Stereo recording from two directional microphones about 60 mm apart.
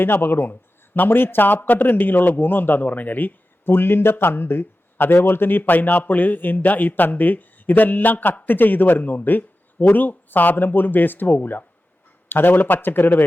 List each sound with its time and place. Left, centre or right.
0.0 s a man's voice: left